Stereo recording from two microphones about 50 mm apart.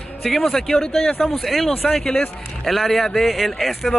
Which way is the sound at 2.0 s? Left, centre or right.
Left.